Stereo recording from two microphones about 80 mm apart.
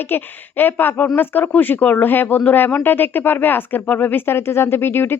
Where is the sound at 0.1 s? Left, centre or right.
Left.